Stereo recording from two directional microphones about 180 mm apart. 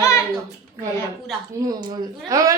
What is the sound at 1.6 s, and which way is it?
Speech, 20° right (ahead or behind).